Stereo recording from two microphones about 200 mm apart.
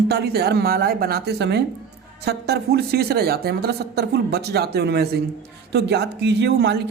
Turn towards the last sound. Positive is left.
turn(degrees=-60)  # may be behind; listen again after turning